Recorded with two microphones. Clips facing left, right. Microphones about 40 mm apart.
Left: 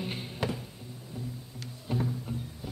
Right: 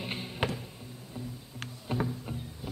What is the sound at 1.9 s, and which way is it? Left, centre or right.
Music, centre.